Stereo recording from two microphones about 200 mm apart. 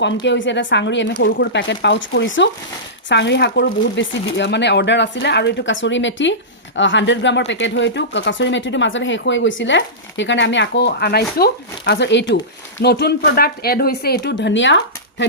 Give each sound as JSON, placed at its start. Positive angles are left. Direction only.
{"t": 0.0, "sound": "speech", "side_deg": 65}